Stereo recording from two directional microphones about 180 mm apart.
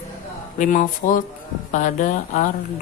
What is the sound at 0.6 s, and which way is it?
Speech, 45° left (ahead or behind).